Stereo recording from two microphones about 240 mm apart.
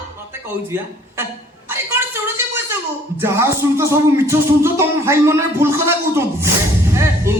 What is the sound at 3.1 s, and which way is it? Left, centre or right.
Music, centre.